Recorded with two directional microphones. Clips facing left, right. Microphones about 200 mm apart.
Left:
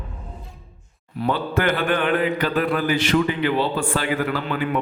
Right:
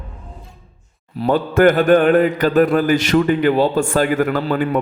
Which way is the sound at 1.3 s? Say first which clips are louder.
Right 8 dB; 45° right (ahead or behind).